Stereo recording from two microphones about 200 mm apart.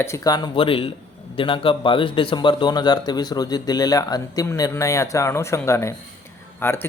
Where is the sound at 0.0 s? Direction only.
15° left (ahead or behind).